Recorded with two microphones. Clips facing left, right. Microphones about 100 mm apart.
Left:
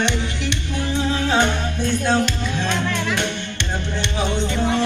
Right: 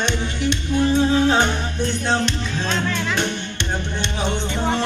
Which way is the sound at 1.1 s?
20° right (ahead or behind).